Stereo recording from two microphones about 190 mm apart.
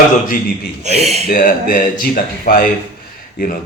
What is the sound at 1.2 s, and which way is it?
A man's voice, 50° left (ahead or behind).